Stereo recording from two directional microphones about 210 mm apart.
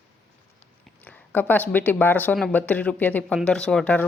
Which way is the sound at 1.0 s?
10° left (ahead or behind).